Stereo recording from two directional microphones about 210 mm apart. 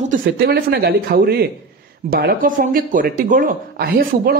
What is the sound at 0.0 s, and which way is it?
Speech, 45° right (ahead or behind).